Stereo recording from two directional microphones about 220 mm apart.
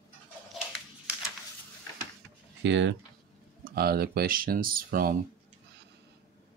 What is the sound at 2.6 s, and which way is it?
Speech, 55° right (ahead or behind).